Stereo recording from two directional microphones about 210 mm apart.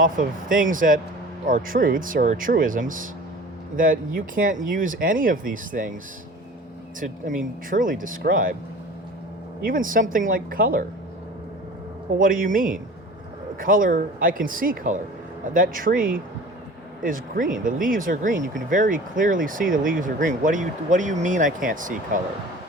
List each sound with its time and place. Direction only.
0.0 s speech: 40° right (ahead or behind)
7.0 s speech: 40° right (ahead or behind)
9.6 s speech: 40° right (ahead or behind)
12.2 s speech: 40° right (ahead or behind)